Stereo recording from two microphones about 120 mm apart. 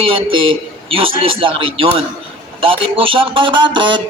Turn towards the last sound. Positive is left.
turn(degrees=-45)  # may be behind; listen again after turning